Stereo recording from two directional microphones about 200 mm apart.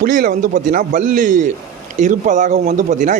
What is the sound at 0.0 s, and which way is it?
A man's voice, 45° right (ahead or behind).